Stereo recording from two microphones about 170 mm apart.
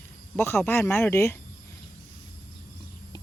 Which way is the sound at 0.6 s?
15° left (ahead or behind).